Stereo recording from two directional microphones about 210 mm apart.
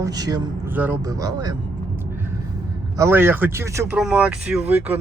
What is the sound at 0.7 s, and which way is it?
Speech, 10° right (ahead or behind).